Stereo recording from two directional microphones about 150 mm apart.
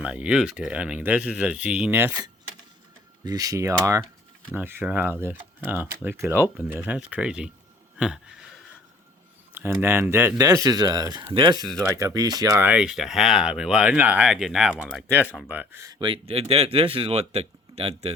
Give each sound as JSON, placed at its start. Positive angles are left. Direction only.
{"t": 0.0, "sound": "speech", "side_deg": -5}
{"t": 3.2, "sound": "speech", "side_deg": -25}
{"t": 7.9, "sound": "a sound", "side_deg": -5}
{"t": 9.6, "sound": "speech", "side_deg": -15}
{"t": 12.6, "sound": "speech", "side_deg": -5}
{"t": 16.0, "sound": "speech", "side_deg": -35}